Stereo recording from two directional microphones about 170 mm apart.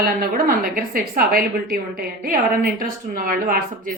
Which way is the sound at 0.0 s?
60° right (ahead or behind).